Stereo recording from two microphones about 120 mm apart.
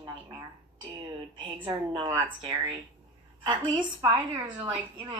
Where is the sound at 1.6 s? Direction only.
45° right (ahead or behind).